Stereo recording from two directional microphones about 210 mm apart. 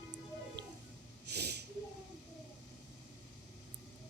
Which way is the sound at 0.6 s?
55° right (ahead or behind).